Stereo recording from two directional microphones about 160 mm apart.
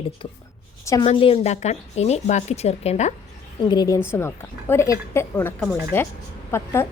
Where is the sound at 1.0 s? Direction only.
35° left (ahead or behind).